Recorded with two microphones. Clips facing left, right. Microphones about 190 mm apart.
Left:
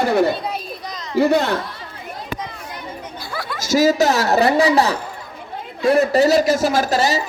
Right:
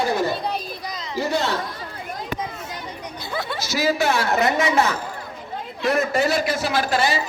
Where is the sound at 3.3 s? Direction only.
25° right (ahead or behind).